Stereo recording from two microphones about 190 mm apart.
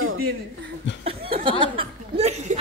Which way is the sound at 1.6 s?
25° right (ahead or behind).